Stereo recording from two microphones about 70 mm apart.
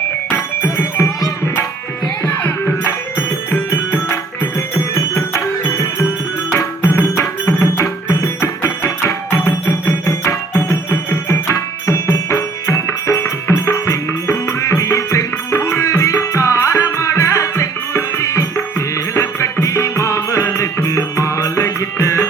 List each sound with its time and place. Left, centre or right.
0.3 s music: left
2.2 s music: left